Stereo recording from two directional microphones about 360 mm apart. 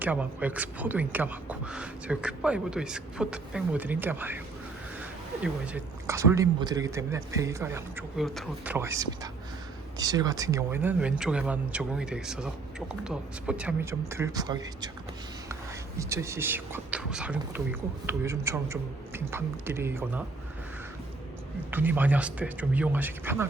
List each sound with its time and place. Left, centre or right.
0.0 s speech: centre
5.4 s speech: centre
16.0 s speech: centre
21.7 s speech: centre